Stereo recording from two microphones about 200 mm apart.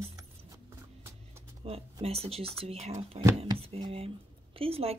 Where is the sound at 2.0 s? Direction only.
30° right (ahead or behind).